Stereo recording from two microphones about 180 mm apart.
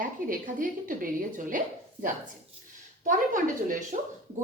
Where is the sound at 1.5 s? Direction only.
45° right (ahead or behind).